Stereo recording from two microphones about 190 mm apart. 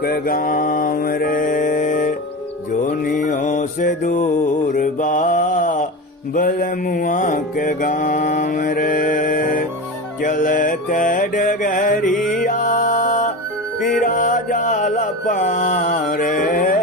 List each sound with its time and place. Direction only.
0.0 s mantra: 50° left (ahead or behind)
4.7 s a sound: 45° left (ahead or behind)
6.3 s mantra: 50° left (ahead or behind)
10.2 s music: 45° left (ahead or behind)
14.0 s mantra: 40° left (ahead or behind)